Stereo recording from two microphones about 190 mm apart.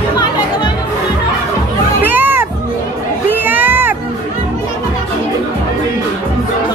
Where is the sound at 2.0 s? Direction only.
10° right (ahead or behind).